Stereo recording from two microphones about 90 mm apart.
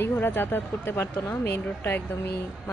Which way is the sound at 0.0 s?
25° left (ahead or behind).